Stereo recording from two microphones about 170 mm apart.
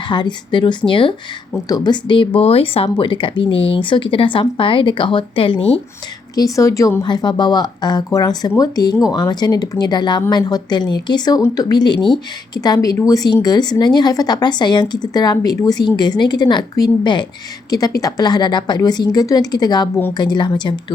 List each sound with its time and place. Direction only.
0.1 s speech: 25° left (ahead or behind)
6.3 s speech: 20° left (ahead or behind)